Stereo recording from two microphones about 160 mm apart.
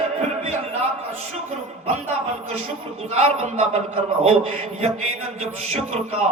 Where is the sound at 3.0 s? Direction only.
40° right (ahead or behind).